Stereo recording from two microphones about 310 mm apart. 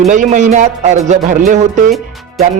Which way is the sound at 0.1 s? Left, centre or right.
Right.